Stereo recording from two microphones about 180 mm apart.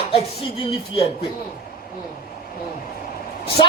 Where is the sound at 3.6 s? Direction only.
25° left (ahead or behind).